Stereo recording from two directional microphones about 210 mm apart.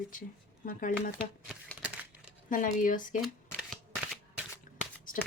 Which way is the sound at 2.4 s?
40° left (ahead or behind).